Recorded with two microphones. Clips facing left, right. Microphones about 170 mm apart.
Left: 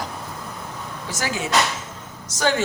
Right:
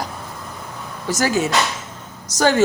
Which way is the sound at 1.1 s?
40° right (ahead or behind).